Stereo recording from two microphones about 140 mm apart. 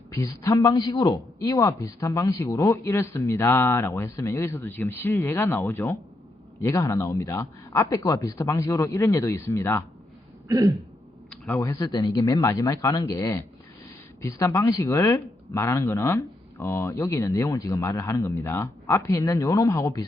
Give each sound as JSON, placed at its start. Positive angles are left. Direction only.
{"t": 0.1, "sound": "speech", "side_deg": 25}
{"t": 10.5, "sound": "throat clearing", "side_deg": -25}
{"t": 11.3, "sound": "a sound", "side_deg": 15}
{"t": 11.6, "sound": "speech", "side_deg": 25}